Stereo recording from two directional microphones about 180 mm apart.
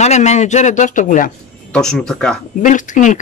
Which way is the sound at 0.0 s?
40° left (ahead or behind).